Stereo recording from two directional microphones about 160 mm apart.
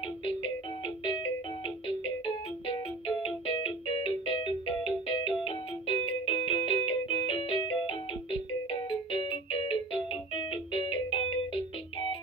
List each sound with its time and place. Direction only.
0.2 s music: 30° left (ahead or behind)
2.2 s music: 35° left (ahead or behind)